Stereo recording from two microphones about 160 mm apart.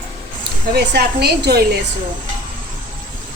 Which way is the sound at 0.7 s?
90° right.